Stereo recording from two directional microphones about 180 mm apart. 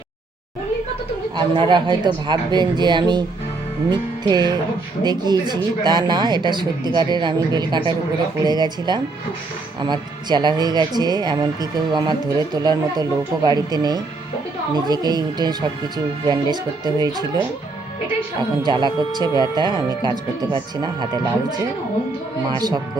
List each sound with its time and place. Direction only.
1.4 s speech: 25° right (ahead or behind)
3.8 s music: 25° right (ahead or behind)
5.0 s speech: 25° right (ahead or behind)
18.6 s speech: 25° right (ahead or behind)
22.4 s speech: 20° right (ahead or behind)